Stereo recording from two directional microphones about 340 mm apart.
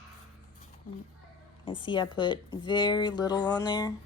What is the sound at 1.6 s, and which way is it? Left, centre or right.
Speech, centre.